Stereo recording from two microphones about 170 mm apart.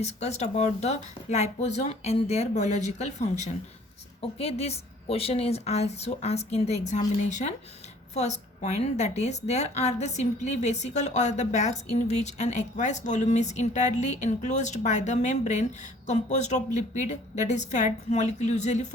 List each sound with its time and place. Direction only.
0.0 s a woman's voice: 40° left (ahead or behind)